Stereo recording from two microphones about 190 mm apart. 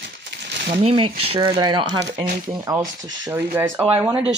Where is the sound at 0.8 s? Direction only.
30° right (ahead or behind).